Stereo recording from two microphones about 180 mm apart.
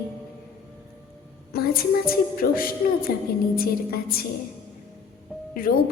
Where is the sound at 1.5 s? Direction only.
60° left (ahead or behind).